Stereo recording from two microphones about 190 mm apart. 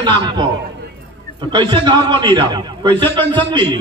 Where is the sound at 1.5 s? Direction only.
25° right (ahead or behind).